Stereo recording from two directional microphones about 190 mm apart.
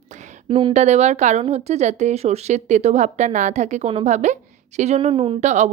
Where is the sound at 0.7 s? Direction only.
35° right (ahead or behind).